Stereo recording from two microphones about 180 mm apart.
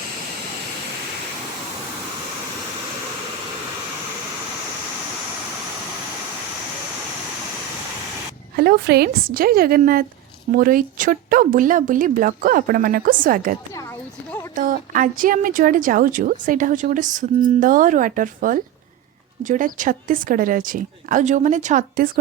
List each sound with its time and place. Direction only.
8.5 s a woman's voice: 60° right (ahead or behind)